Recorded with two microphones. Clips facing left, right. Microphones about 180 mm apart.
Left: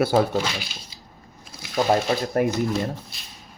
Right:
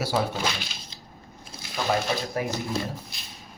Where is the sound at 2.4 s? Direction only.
50° left (ahead or behind).